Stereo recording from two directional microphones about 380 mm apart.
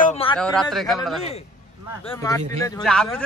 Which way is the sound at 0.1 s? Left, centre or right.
Centre.